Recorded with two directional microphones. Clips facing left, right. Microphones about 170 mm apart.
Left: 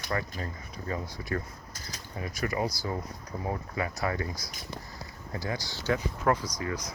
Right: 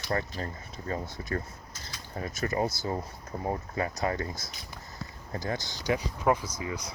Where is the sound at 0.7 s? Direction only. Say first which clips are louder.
Even; 25° right (ahead or behind).